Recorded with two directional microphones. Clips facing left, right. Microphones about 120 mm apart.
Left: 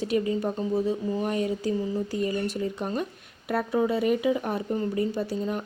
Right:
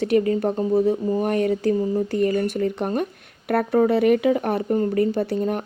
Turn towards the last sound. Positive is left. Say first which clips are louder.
# right 6 dB
turn(degrees=-55)  # may be behind; listen again after turning